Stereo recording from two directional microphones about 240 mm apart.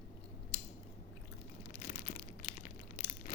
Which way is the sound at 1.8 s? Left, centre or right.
Left.